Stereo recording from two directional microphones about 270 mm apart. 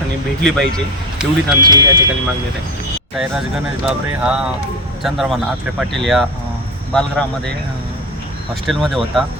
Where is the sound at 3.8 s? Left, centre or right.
Centre.